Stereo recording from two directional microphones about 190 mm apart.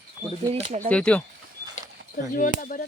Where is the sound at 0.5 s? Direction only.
35° right (ahead or behind).